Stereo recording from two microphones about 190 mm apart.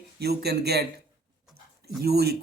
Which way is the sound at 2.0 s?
55° right (ahead or behind).